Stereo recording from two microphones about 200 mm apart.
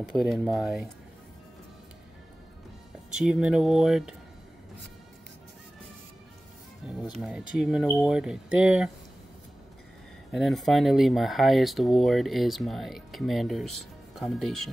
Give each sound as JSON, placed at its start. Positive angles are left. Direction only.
{"t": 0.3, "sound": "speech", "side_deg": 0}
{"t": 3.2, "sound": "speech", "side_deg": -5}
{"t": 6.9, "sound": "speech", "side_deg": 0}
{"t": 10.3, "sound": "speech", "side_deg": 0}